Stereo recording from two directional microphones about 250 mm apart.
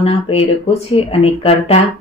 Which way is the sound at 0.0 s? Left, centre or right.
Left.